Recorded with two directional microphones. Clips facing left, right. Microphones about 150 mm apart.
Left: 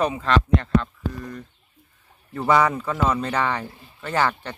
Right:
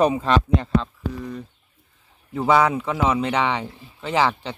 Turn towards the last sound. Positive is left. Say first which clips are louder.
# right 2 dB
turn(degrees=-5)  # may be behind; listen again after turning